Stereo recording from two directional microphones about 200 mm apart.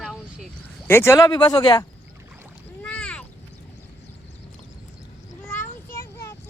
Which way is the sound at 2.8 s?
5° left (ahead or behind).